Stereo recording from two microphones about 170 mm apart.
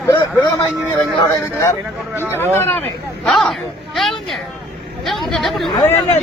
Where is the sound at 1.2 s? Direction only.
15° left (ahead or behind).